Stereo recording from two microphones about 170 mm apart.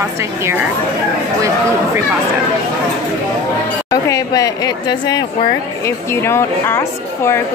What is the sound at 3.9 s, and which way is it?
A woman's voice, 20° left (ahead or behind).